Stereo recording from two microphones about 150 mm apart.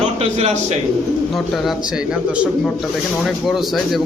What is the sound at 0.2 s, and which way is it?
Speech, 45° right (ahead or behind).